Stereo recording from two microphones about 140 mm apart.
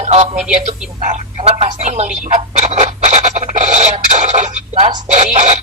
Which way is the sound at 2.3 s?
50° right (ahead or behind).